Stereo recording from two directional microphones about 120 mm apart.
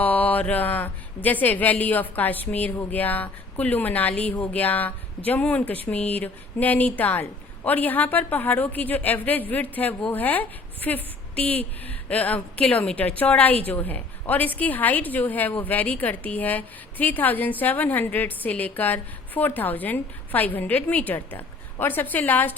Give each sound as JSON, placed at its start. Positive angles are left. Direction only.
{"t": 0.0, "sound": "a woman's voice", "side_deg": 15}